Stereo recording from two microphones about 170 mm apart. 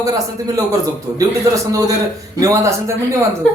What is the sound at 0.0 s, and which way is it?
A man's voice, 20° right (ahead or behind).